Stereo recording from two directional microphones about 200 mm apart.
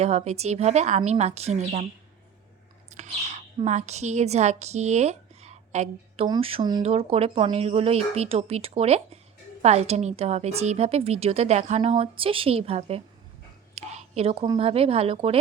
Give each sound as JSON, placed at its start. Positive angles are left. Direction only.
{"t": 0.0, "sound": "a woman's voice", "side_deg": -30}
{"t": 2.9, "sound": "a woman's voice", "side_deg": -35}